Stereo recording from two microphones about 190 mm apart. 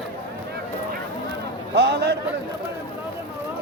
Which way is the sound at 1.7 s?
60° right (ahead or behind).